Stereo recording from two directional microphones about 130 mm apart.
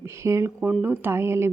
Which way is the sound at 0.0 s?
20° right (ahead or behind).